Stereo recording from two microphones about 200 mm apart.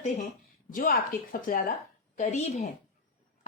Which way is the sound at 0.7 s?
45° left (ahead or behind).